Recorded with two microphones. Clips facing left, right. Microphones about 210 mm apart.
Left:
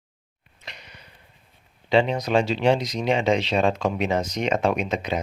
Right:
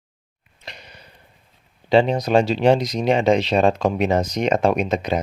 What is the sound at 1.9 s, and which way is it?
Speech, 35° right (ahead or behind).